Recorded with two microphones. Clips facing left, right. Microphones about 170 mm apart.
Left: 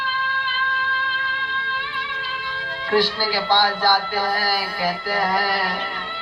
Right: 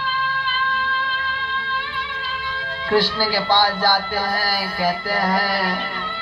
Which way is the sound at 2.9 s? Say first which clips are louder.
Right 1 dB; 20° left (ahead or behind).